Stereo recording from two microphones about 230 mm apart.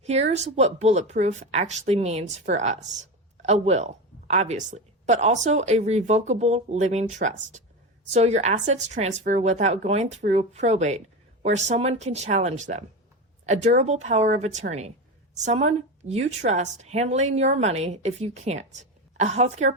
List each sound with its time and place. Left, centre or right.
0.0 s speech: right